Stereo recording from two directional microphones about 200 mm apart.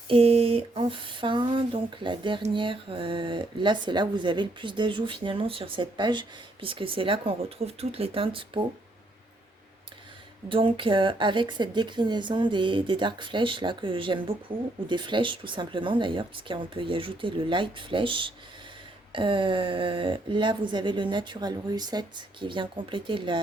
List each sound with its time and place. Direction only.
0.1 s speech: 30° right (ahead or behind)
10.5 s speech: 25° right (ahead or behind)